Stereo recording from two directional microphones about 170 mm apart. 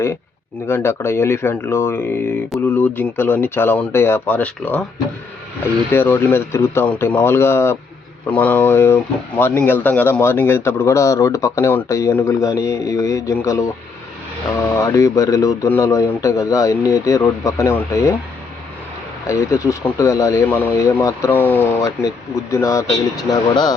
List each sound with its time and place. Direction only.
0.7 s speech: 15° left (ahead or behind)
5.9 s speech: 15° left (ahead or behind)
19.3 s speech: 20° left (ahead or behind)